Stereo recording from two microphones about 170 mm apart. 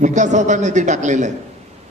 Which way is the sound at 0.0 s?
45° right (ahead or behind).